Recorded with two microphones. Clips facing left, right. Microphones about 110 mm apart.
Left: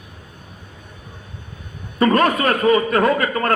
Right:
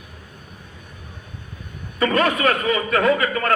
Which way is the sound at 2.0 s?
40° left (ahead or behind).